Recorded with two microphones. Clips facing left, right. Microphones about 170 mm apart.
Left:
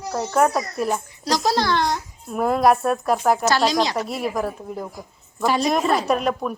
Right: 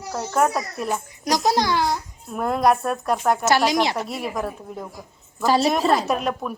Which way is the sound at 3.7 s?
25° right (ahead or behind).